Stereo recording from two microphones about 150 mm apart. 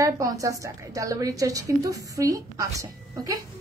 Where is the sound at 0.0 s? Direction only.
20° right (ahead or behind).